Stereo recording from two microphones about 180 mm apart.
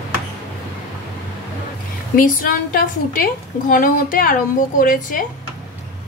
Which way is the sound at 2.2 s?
50° left (ahead or behind).